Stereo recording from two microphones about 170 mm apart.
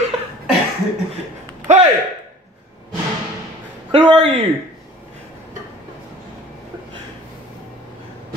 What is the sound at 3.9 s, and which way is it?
Speech, 30° right (ahead or behind).